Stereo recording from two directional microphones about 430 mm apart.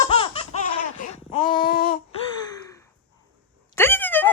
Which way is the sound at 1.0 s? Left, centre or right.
Centre.